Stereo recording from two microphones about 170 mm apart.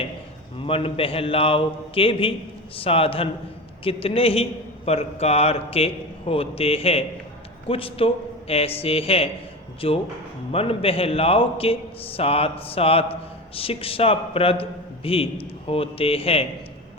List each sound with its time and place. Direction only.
0.6 s a man's voice: 35° left (ahead or behind)